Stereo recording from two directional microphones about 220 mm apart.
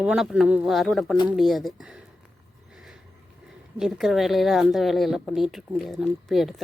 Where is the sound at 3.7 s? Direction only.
Centre (ahead or behind).